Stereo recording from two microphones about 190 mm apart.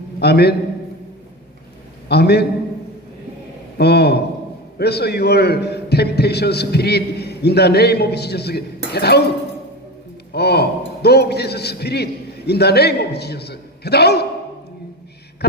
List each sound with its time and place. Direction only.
0.2 s a man's voice: 60° left (ahead or behind)
2.0 s a man's voice: 60° left (ahead or behind)
3.8 s a man's voice: 60° left (ahead or behind)
10.3 s a man's voice: 60° left (ahead or behind)